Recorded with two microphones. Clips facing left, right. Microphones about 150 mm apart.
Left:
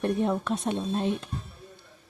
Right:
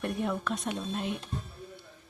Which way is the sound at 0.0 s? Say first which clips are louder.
Left 5 dB; 30° left (ahead or behind).